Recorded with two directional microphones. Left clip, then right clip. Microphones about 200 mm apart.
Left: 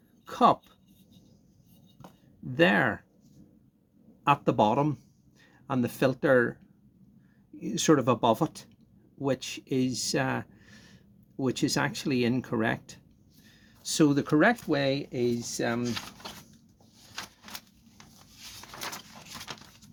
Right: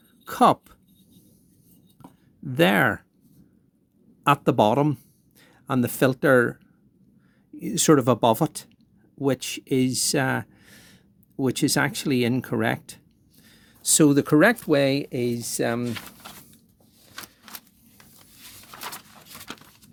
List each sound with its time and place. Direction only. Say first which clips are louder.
0.3 s speech: right 4 dB; 50° right (ahead or behind)
2.4 s speech: right 4 dB; 50° right (ahead or behind)
4.2 s speech: right 4 dB; 50° right (ahead or behind)
7.6 s speech: right 5 dB; 45° right (ahead or behind)